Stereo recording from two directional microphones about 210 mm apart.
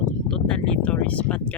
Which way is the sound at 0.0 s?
5° left (ahead or behind).